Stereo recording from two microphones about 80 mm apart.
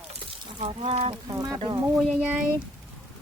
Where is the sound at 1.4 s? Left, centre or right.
Right.